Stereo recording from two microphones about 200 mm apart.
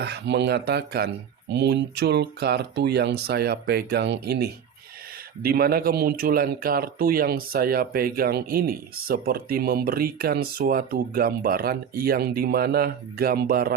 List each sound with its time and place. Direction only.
0.0 s speech: 55° right (ahead or behind)